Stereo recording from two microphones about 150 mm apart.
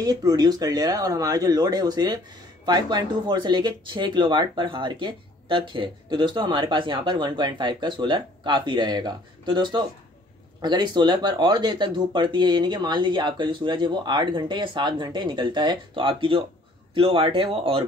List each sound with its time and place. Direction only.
0.0 s speech: 25° right (ahead or behind)